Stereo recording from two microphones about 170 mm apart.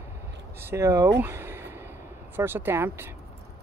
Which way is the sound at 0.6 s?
15° right (ahead or behind).